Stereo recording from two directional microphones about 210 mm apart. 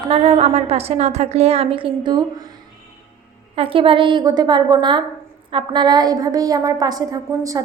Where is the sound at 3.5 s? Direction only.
25° right (ahead or behind).